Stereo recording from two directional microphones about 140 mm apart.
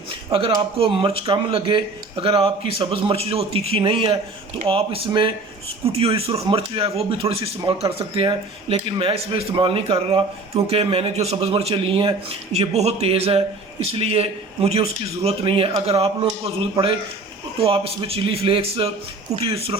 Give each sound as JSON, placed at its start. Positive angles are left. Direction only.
{"t": 0.3, "sound": "a man's voice", "side_deg": -40}